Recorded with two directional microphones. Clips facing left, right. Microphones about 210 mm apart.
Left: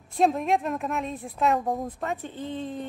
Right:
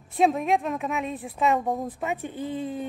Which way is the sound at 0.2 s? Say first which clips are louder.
Right 1 dB; centre (ahead or behind).